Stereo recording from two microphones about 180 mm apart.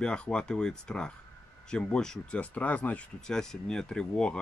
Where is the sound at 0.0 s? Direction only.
5° left (ahead or behind).